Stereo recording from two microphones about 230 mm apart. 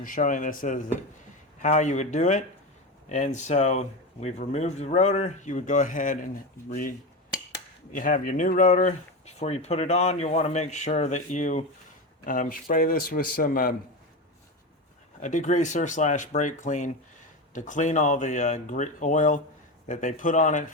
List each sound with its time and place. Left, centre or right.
0.0 s speech: left
7.9 s speech: left
15.2 s speech: left